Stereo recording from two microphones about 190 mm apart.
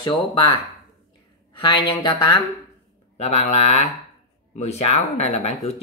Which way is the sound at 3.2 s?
35° left (ahead or behind).